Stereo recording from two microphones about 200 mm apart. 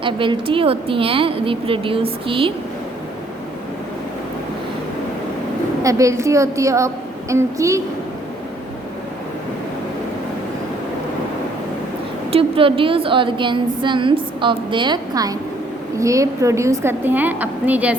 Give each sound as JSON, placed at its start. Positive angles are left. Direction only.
{"t": 0.0, "sound": "a woman's voice", "side_deg": -25}
{"t": 5.8, "sound": "a woman's voice", "side_deg": -15}
{"t": 12.3, "sound": "a woman's voice", "side_deg": -25}